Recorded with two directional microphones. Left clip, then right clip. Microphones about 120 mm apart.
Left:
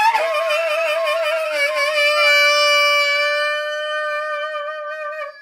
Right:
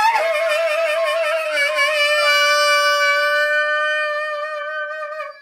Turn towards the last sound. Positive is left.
turn(degrees=25)  # may be behind; listen again after turning